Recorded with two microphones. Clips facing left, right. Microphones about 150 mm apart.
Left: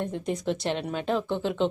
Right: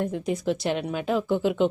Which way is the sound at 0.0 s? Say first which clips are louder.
Right 3 dB; 5° right (ahead or behind).